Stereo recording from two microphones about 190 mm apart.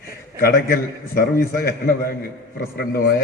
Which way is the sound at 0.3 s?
50° left (ahead or behind).